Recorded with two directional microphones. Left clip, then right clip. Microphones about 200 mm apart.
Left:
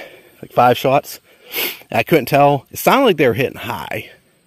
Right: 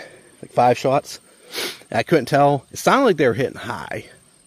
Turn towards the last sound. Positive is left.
turn(degrees=30)  # may be behind; listen again after turning